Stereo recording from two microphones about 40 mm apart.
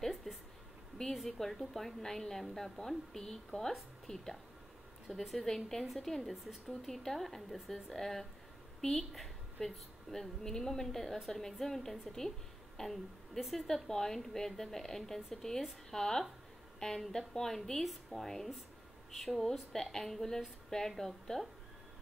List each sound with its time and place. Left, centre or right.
0.0 s a sound: centre
1.1 s a woman's voice: centre
5.0 s a woman's voice: centre
6.3 s a woman's voice: centre
6.7 s a woman's voice: centre